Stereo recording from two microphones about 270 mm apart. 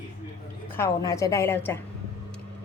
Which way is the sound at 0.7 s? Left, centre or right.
Centre.